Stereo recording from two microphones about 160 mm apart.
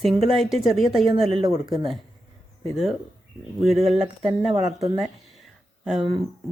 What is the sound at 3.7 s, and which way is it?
Speech, 45° right (ahead or behind).